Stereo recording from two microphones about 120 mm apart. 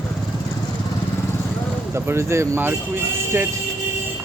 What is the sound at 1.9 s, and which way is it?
Speech, 20° right (ahead or behind).